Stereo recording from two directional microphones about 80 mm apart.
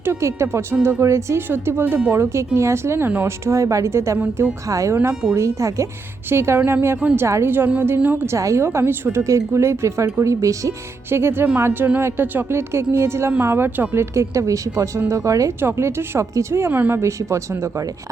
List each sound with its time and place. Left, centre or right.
0.0 s speech: right
8.4 s speech: right
9.2 s speech: right
15.6 s speech: right
17.0 s speech: right